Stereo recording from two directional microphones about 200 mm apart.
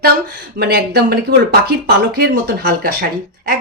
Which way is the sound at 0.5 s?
50° right (ahead or behind).